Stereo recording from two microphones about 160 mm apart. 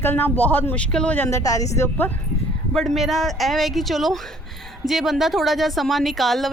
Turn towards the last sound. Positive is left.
turn(degrees=0)  # may be behind; listen again after turning